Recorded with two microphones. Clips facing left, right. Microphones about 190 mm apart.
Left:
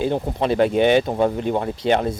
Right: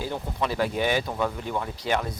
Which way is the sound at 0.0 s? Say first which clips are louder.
Left 8 dB; 25° left (ahead or behind).